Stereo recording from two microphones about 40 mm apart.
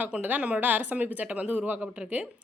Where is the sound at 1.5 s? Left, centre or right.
Right.